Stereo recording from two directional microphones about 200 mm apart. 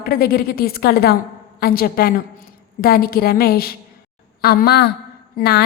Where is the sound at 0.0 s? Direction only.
50° left (ahead or behind).